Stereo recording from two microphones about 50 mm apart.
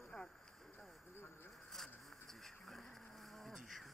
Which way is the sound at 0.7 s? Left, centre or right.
Left.